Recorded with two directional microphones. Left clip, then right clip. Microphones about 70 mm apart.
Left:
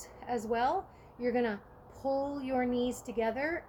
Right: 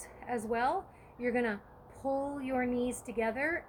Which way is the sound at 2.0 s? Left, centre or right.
Left.